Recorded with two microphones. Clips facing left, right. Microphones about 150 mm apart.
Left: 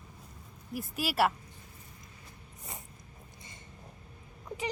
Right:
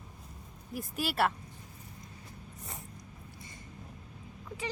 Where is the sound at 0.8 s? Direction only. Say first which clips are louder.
Left 2 dB; 5° left (ahead or behind).